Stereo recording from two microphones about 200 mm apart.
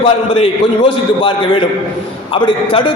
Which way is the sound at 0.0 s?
25° left (ahead or behind).